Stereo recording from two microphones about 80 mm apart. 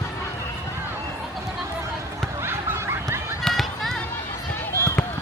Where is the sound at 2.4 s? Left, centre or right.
Right.